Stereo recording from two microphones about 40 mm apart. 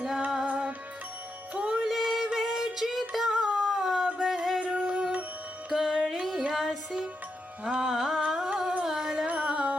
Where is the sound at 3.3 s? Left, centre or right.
Centre.